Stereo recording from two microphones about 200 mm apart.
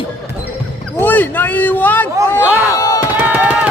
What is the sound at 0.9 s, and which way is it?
Speech, 10° left (ahead or behind).